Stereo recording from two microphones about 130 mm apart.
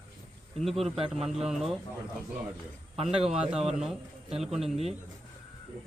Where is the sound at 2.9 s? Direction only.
50° right (ahead or behind).